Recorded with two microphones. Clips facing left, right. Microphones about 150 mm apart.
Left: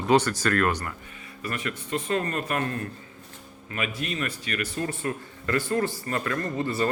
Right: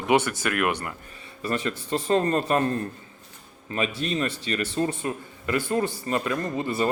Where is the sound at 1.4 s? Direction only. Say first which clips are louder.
Right 5 dB; 30° right (ahead or behind).